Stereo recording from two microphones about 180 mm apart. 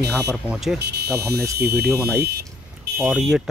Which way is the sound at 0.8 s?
65° right (ahead or behind).